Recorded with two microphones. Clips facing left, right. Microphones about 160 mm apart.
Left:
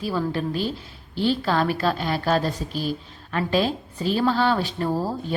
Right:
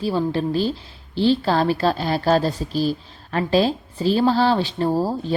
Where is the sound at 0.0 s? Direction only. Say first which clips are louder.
Right 4 dB; 30° right (ahead or behind).